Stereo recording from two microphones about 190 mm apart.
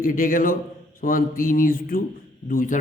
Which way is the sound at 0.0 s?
45° left (ahead or behind).